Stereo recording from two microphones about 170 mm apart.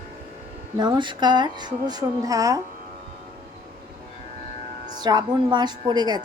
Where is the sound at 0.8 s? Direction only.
25° right (ahead or behind).